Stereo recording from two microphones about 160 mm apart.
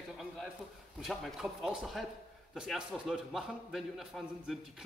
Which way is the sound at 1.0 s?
Centre (ahead or behind).